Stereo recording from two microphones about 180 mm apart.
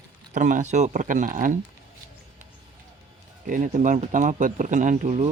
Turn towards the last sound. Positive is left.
turn(degrees=-40)  # may be behind; listen again after turning